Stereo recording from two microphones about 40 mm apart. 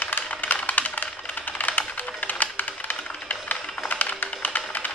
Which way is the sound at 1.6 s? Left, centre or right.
Left.